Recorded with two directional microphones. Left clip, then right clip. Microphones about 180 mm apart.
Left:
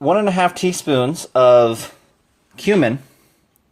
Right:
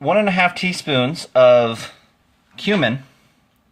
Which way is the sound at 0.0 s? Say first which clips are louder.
Even; 40° left (ahead or behind).